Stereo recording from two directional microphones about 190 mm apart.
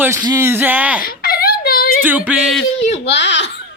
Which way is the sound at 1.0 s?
50° left (ahead or behind).